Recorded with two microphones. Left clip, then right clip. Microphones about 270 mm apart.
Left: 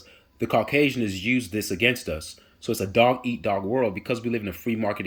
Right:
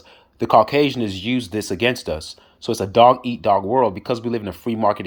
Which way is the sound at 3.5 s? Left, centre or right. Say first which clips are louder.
Right 8 dB; right.